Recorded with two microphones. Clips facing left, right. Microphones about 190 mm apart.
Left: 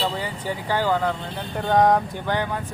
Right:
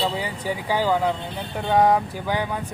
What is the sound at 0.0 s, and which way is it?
Speech, 10° right (ahead or behind).